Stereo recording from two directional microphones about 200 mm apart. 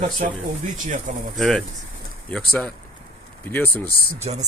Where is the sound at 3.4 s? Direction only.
10° left (ahead or behind).